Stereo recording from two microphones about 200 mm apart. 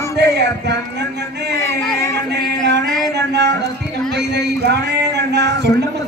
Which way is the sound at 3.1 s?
60° right (ahead or behind).